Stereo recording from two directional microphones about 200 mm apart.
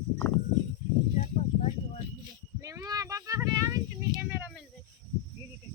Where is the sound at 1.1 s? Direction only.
35° left (ahead or behind).